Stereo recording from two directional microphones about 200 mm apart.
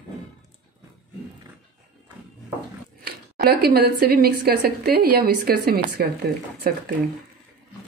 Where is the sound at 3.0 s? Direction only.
50° right (ahead or behind).